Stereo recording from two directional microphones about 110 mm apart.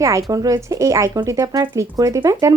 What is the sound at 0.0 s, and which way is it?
Speech, 30° right (ahead or behind).